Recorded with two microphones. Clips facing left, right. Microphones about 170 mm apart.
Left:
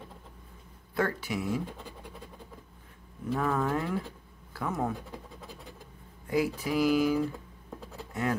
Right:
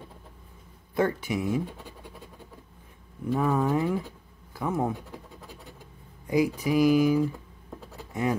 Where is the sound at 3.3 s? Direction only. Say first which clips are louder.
Right 4 dB; 15° right (ahead or behind).